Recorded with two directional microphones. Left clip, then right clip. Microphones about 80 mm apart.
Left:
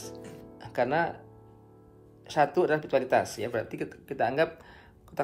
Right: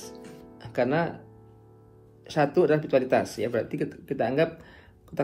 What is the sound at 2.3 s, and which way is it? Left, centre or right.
Speech, left.